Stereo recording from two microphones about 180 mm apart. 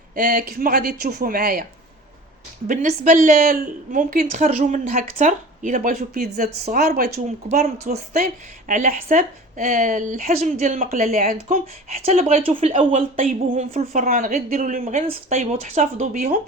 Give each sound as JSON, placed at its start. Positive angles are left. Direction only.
{"t": 0.2, "sound": "speech", "side_deg": -55}
{"t": 2.6, "sound": "a woman's voice", "side_deg": -45}
{"t": 7.9, "sound": "speech", "side_deg": -55}